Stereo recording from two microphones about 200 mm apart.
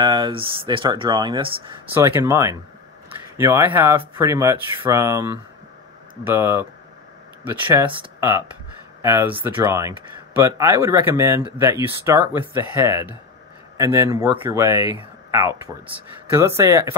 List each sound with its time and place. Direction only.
0.0 s speech: 20° right (ahead or behind)